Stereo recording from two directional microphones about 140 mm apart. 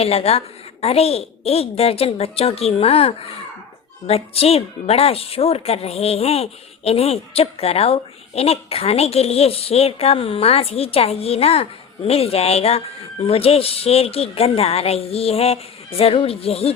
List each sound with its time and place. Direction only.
0.0 s a woman's voice: 45° left (ahead or behind)